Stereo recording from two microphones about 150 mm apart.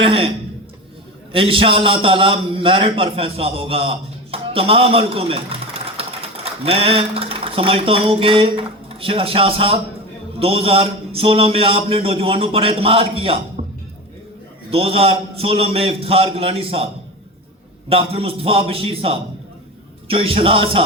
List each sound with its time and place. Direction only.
0.0 s speech: 35° right (ahead or behind)
1.3 s a man's voice: 35° right (ahead or behind)
14.7 s a man's voice: 40° right (ahead or behind)